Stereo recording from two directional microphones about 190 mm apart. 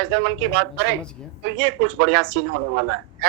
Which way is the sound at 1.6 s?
80° right.